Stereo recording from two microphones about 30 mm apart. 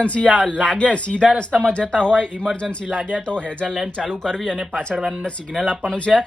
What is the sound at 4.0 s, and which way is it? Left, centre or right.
Speech, centre.